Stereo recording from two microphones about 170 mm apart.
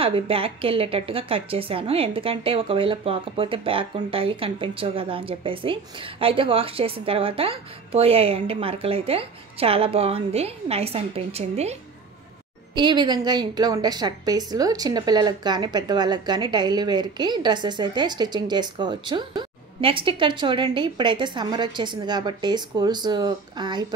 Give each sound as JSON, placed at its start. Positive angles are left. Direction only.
{"t": 0.0, "sound": "a woman's voice", "side_deg": -35}
{"t": 12.7, "sound": "a woman's voice", "side_deg": -25}